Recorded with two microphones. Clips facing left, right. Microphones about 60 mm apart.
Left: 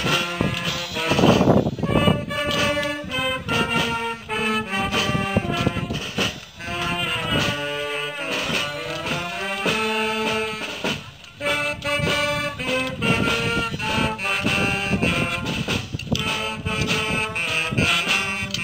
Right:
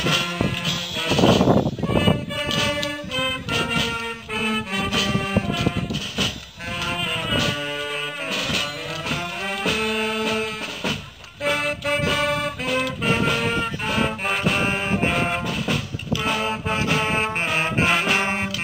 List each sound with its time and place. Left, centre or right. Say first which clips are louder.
0.0 s music: even; centre
1.0 s music: even; left
2.3 s music: left 2 dB; centre
6.8 s music: left 1 dB; centre
16.4 s music: right 3 dB; right